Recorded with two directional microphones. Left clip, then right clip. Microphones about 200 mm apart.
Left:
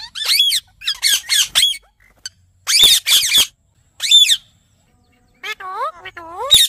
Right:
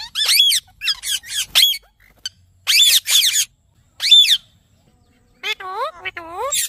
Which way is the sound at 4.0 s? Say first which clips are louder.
Even; 15° left (ahead or behind).